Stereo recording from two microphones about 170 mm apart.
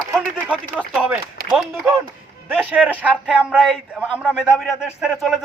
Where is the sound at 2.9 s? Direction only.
10° left (ahead or behind).